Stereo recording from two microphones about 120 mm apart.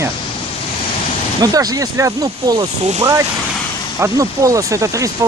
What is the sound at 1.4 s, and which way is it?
Speech, 30° right (ahead or behind).